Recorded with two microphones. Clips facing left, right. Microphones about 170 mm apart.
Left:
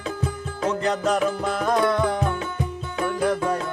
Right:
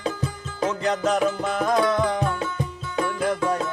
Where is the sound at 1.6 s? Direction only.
Centre (ahead or behind).